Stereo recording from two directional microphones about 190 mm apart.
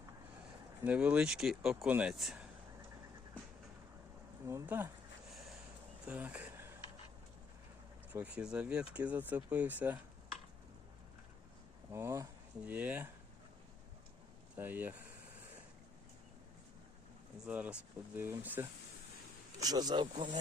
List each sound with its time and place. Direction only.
0.8 s speech: 5° right (ahead or behind)
4.4 s speech: 15° right (ahead or behind)
6.1 s a sound: 10° right (ahead or behind)
8.1 s speech: 5° right (ahead or behind)
11.9 s speech: 15° right (ahead or behind)
14.5 s speech: 10° right (ahead or behind)
17.4 s speech: 5° right (ahead or behind)
19.6 s speech: 20° right (ahead or behind)